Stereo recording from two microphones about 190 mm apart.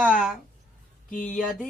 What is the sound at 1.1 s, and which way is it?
Speech, 5° left (ahead or behind).